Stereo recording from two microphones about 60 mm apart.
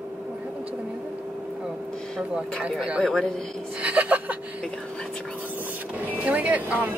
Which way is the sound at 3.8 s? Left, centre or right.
Right.